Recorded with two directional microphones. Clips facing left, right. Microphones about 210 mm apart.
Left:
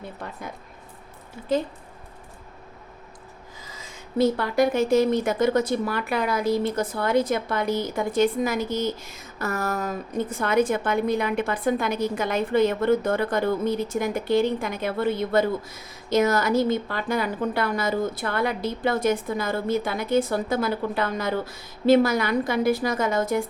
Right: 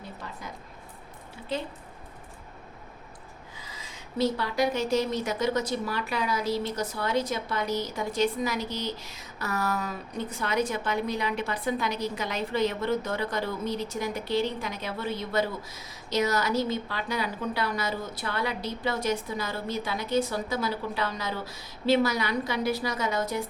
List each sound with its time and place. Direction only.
0.2 s a sound: 55° left (ahead or behind)
1.5 s a woman's voice: 45° left (ahead or behind)
3.6 s a woman's voice: 45° left (ahead or behind)